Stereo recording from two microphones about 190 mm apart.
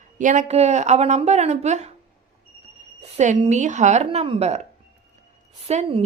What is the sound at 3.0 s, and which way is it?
A woman's voice, 35° right (ahead or behind).